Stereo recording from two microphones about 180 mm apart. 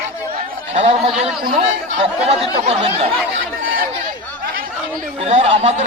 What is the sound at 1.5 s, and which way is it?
Speech, 30° right (ahead or behind).